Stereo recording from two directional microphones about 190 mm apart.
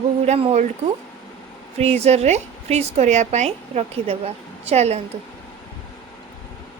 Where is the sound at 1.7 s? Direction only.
35° right (ahead or behind).